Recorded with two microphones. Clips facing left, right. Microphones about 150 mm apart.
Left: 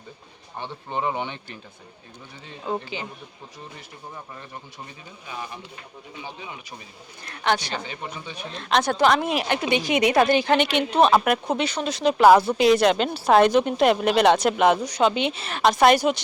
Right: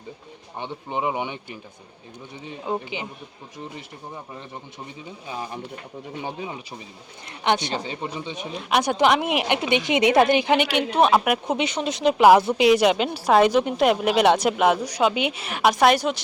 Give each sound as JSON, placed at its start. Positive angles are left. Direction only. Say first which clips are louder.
{"t": 0.6, "sound": "speech", "louder": "right 1 dB", "side_deg": -15}
{"t": 2.5, "sound": "speech", "louder": "right 1 dB", "side_deg": -15}
{"t": 5.3, "sound": "speech", "louder": "right 3 dB", "side_deg": -30}
{"t": 7.3, "sound": "speech", "louder": "right 1 dB", "side_deg": -20}
{"t": 8.4, "sound": "speech", "louder": "even", "side_deg": -10}
{"t": 11.4, "sound": "speech", "louder": "right 1 dB", "side_deg": -20}
{"t": 15.8, "sound": "speech", "louder": "left 2 dB", "side_deg": 0}